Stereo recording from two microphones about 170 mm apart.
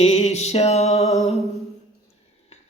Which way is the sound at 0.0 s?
40° left (ahead or behind).